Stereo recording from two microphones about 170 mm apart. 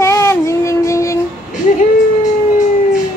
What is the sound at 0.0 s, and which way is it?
Child singing, 15° left (ahead or behind).